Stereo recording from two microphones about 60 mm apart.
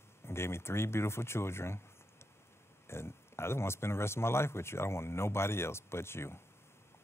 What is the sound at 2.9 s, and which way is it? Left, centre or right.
Speech, left.